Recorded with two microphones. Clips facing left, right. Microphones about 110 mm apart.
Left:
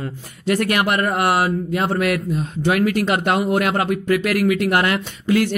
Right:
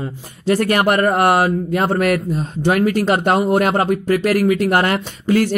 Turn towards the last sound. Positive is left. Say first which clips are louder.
# right 2 dB
turn(degrees=-40)  # may be behind; listen again after turning